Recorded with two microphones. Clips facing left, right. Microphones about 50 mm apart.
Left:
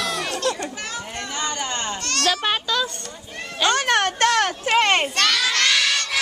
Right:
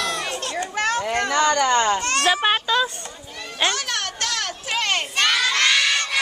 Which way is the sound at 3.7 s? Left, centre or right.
Left.